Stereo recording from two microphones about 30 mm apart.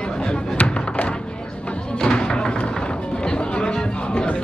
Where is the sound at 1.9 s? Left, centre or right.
Left.